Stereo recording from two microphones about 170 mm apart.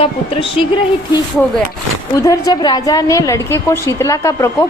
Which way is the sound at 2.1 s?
20° left (ahead or behind).